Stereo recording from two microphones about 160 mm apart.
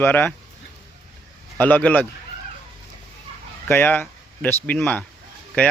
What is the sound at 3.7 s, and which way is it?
Speech, 15° left (ahead or behind).